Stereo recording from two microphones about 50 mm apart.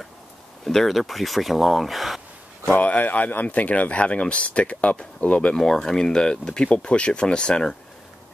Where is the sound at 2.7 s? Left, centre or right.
Left.